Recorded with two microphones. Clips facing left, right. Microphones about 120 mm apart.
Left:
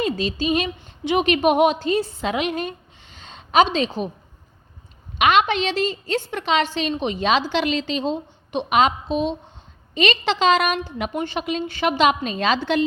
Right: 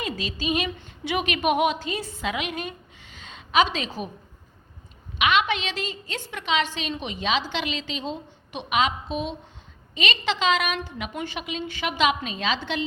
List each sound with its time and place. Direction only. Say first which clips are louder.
0.0 s a woman's voice: left 7 dB; 30° left (ahead or behind)
5.1 s a woman's voice: left 5 dB; 40° left (ahead or behind)